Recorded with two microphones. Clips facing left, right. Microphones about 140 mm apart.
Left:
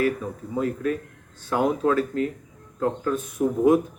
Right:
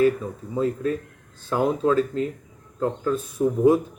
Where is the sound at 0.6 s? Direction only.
30° right (ahead or behind).